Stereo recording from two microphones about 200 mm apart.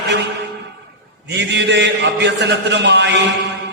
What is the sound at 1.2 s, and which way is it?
A man's voice, 60° right (ahead or behind).